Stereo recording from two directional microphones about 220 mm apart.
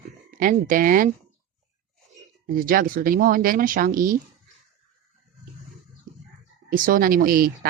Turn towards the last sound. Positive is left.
turn(degrees=-40)  # may be behind; listen again after turning